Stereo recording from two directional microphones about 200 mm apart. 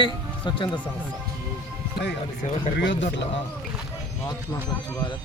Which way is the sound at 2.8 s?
65° left (ahead or behind).